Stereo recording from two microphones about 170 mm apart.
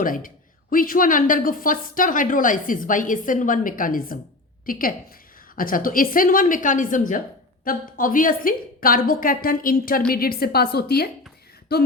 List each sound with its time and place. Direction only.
0.0 s a woman's voice: 55° left (ahead or behind)